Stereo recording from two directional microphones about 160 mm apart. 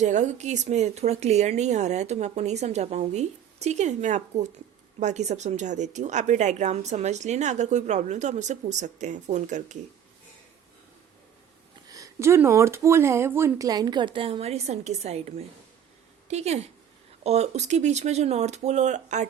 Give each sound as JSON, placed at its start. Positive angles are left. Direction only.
{"t": 0.0, "sound": "a woman's voice", "side_deg": -45}
{"t": 11.9, "sound": "a woman's voice", "side_deg": -20}